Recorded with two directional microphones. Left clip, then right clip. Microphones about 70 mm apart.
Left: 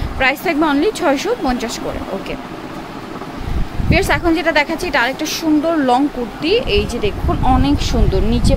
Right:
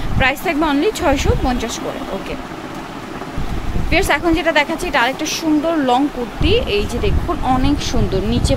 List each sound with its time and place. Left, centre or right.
0.2 s speech: centre
1.4 s speech: left
3.9 s speech: centre
5.8 s speech: centre